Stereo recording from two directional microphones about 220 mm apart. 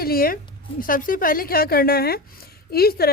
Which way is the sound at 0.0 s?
40° left (ahead or behind).